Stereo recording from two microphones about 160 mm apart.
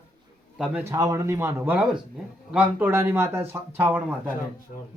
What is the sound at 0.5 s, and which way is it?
Speech, 5° right (ahead or behind).